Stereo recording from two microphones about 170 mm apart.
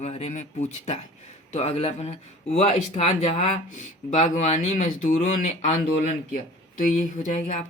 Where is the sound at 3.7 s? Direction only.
50° left (ahead or behind).